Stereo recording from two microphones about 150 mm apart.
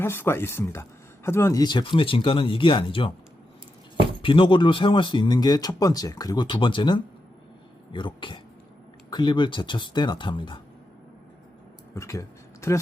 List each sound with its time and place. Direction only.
0.0 s speech: 15° left (ahead or behind)
1.6 s speech: 30° left (ahead or behind)
4.2 s speech: 35° left (ahead or behind)
11.9 s speech: 20° left (ahead or behind)